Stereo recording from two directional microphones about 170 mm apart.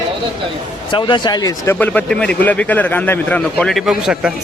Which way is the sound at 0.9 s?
30° left (ahead or behind).